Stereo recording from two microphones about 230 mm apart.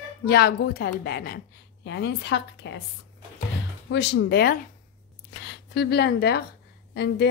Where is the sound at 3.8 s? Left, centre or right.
Left.